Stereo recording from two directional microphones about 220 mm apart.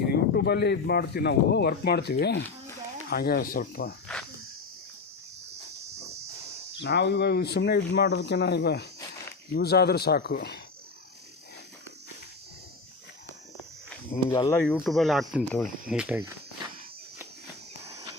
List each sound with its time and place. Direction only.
0.1 s speech: 45° left (ahead or behind)
6.8 s speech: 50° left (ahead or behind)
14.3 s speech: 15° left (ahead or behind)
14.6 s speech: centre (ahead or behind)